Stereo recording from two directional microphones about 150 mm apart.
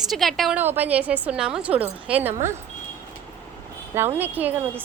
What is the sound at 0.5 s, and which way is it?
Speech, 10° right (ahead or behind).